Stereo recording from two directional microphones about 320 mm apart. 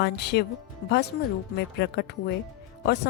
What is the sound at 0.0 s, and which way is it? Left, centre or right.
A woman's voice, left.